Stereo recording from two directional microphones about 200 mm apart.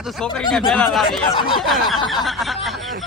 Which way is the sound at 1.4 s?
25° left (ahead or behind).